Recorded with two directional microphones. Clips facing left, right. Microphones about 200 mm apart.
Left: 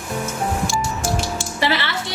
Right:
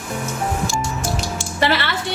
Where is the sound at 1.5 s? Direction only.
50° right (ahead or behind).